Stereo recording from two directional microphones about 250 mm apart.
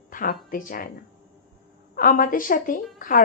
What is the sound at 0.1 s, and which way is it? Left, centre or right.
Speech, left.